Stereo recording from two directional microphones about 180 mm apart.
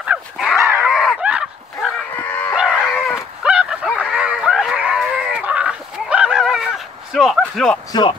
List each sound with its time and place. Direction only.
0.0 s dog: 5° right (ahead or behind)
2.2 s dog: 10° left (ahead or behind)
2.5 s dog: centre (ahead or behind)
4.0 s a sound: 5° right (ahead or behind)
7.9 s speech: 25° left (ahead or behind)